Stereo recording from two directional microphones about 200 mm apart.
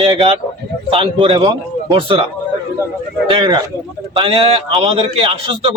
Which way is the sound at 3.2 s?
25° right (ahead or behind).